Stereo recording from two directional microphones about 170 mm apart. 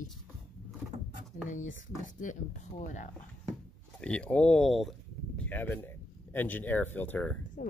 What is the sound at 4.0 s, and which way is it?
Speech, 5° left (ahead or behind).